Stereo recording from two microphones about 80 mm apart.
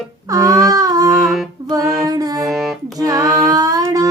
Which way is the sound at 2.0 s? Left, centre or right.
Right.